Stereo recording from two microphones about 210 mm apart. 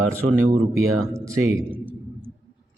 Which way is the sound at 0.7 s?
15° right (ahead or behind).